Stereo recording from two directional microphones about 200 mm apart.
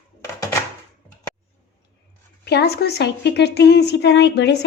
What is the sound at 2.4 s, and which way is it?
A woman's voice, 55° left (ahead or behind).